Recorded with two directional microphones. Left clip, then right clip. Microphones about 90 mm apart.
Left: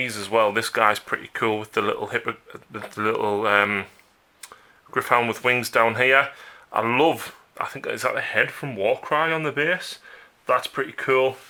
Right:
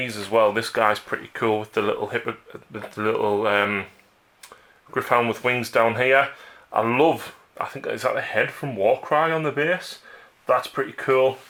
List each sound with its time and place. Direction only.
0.0 s speech: 40° left (ahead or behind)